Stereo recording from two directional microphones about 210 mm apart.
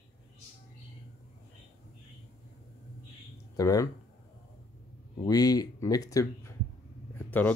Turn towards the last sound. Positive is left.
turn(degrees=10)  # may be behind; listen again after turning